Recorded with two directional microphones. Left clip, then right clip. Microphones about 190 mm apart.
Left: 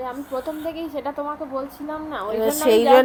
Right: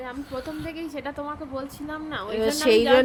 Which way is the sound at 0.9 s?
30° right (ahead or behind).